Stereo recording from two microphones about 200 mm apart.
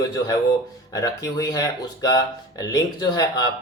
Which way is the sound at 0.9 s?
20° left (ahead or behind).